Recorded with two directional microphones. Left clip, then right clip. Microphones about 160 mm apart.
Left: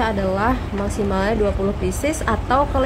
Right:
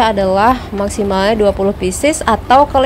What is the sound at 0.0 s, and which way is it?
A woman's voice, 35° right (ahead or behind).